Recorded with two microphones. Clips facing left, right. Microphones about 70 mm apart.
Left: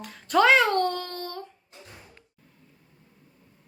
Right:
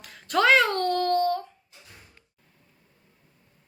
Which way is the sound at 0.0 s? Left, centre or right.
Centre.